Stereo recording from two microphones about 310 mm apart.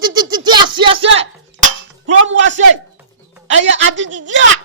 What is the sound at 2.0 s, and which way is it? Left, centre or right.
A man's voice, right.